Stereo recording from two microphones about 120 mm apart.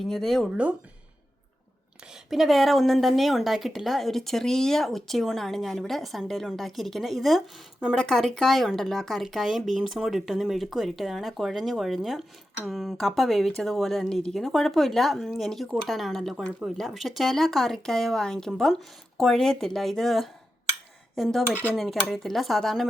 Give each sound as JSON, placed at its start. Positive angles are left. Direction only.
{"t": 0.0, "sound": "a woman's voice", "side_deg": 5}
{"t": 2.3, "sound": "a woman's voice", "side_deg": 0}